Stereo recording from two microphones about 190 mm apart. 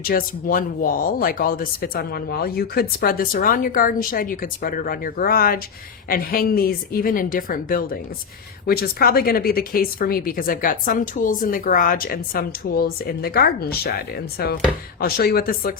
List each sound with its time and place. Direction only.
0.0 s a woman's voice: 50° left (ahead or behind)